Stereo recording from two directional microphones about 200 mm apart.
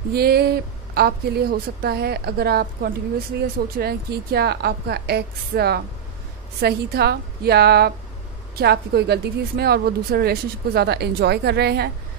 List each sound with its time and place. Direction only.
0.1 s a woman's voice: 50° right (ahead or behind)